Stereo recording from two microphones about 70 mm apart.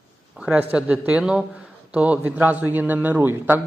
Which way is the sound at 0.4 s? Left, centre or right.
Centre.